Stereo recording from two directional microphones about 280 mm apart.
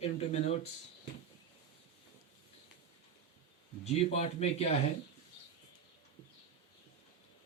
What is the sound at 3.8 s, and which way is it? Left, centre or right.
Speech, left.